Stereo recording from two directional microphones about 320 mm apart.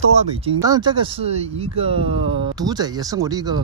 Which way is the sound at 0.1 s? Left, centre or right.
Centre.